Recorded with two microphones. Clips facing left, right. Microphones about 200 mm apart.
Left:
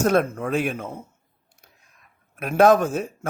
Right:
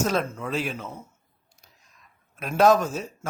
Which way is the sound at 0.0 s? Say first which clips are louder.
Left 5 dB; 55° left (ahead or behind).